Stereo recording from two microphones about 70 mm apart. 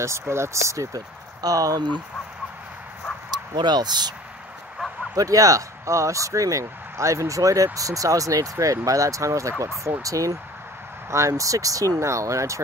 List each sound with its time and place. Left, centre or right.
0.0 s speech: right
3.5 s speech: right
5.1 s speech: right